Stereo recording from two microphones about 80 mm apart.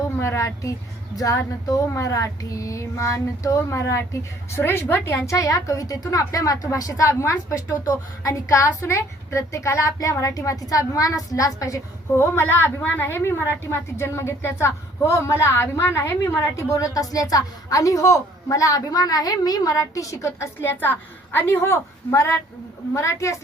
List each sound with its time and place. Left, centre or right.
0.2 s child singing: left
12.1 s a woman's voice: left